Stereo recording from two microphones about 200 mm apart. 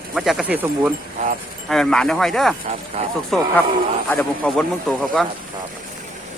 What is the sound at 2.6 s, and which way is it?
Speech, 35° right (ahead or behind).